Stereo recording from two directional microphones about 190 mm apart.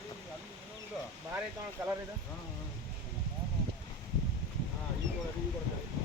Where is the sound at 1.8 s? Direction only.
15° right (ahead or behind).